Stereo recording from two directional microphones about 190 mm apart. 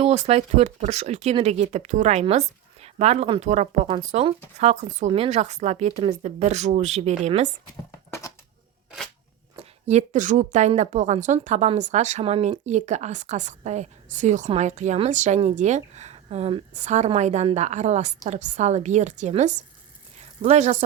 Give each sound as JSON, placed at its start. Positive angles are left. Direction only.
{"t": 0.0, "sound": "a woman's voice", "side_deg": -35}
{"t": 9.6, "sound": "a woman's voice", "side_deg": -35}
{"t": 20.1, "sound": "a sound", "side_deg": -35}